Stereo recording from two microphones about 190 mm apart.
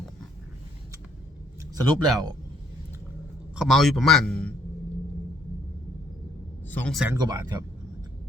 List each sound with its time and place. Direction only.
1.7 s speech: 20° right (ahead or behind)
3.5 s a man's voice: centre (ahead or behind)
6.8 s a man's voice: centre (ahead or behind)
7.1 s speech: 20° right (ahead or behind)